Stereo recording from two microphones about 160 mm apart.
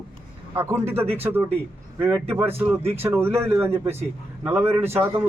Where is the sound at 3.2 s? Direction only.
15° right (ahead or behind).